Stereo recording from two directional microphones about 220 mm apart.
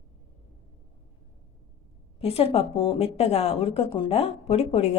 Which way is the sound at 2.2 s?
25° left (ahead or behind).